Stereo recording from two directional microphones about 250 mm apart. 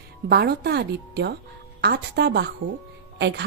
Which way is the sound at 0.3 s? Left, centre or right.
Right.